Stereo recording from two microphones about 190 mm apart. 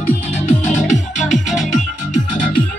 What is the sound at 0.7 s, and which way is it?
Music, 40° left (ahead or behind).